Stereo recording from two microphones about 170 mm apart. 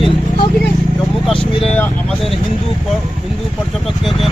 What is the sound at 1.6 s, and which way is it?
Speech, 10° left (ahead or behind).